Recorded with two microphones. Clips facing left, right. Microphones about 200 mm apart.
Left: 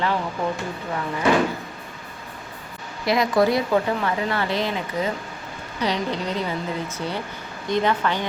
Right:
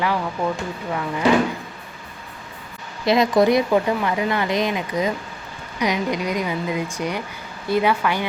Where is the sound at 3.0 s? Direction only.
25° right (ahead or behind).